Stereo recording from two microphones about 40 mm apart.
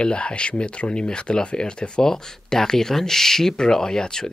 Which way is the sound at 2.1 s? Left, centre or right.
Centre.